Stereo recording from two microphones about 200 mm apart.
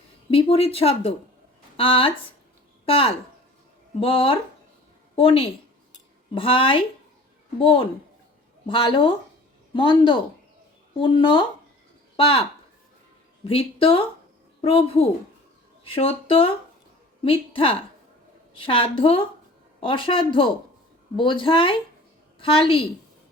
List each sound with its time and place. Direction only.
0.3 s speech: 30° left (ahead or behind)